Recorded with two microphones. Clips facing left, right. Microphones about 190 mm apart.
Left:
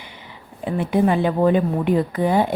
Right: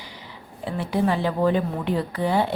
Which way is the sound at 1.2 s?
15° left (ahead or behind).